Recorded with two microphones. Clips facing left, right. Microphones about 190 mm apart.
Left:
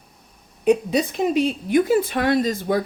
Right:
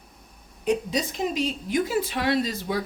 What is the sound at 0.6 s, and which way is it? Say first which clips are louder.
A woman's voice: left 7 dB; 60° left (ahead or behind).